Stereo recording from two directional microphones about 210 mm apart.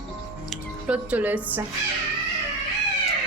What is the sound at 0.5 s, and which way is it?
Speech, 5° right (ahead or behind).